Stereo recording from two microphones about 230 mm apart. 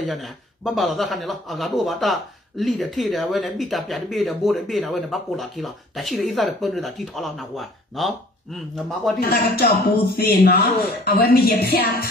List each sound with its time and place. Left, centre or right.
0.0 s a man's voice: centre
9.2 s speech: left